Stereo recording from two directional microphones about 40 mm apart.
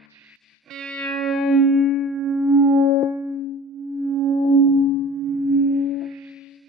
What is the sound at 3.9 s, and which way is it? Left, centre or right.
Chirp tone, left.